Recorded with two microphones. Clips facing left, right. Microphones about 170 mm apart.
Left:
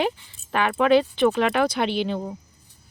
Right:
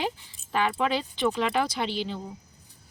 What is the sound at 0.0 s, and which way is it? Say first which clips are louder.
Speech: left 6 dB; 65° left (ahead or behind).